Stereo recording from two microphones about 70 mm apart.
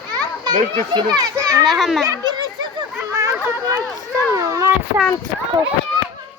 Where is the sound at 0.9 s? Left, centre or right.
Right.